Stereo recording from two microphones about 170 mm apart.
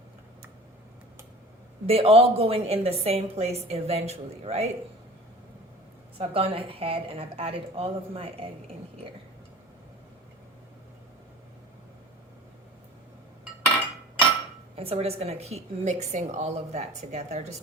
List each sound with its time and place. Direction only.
1.9 s a woman's voice: 35° right (ahead or behind)
6.1 s a woman's voice: 35° right (ahead or behind)
14.8 s a woman's voice: 35° right (ahead or behind)